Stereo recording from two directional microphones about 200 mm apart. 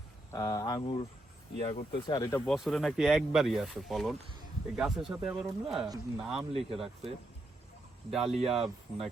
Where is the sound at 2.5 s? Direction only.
Centre (ahead or behind).